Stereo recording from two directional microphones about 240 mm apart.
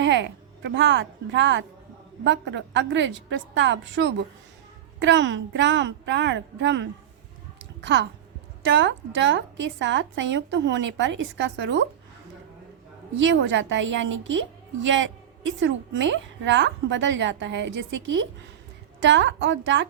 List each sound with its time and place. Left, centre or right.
0.0 s a woman's voice: right
13.2 s a woman's voice: right